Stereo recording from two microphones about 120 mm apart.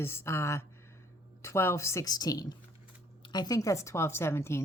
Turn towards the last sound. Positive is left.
turn(degrees=20)  # may be behind; listen again after turning